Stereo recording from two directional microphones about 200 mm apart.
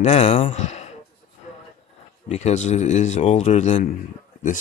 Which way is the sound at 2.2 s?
35° left (ahead or behind).